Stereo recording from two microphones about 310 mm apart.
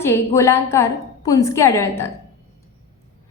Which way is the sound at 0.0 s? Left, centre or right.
Centre.